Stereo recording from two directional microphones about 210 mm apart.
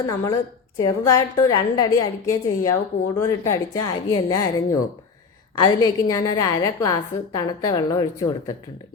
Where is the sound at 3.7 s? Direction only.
15° left (ahead or behind).